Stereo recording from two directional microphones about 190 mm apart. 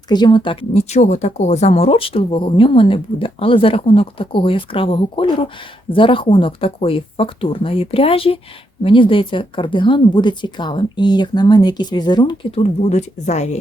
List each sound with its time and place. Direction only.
0.1 s speech: 25° left (ahead or behind)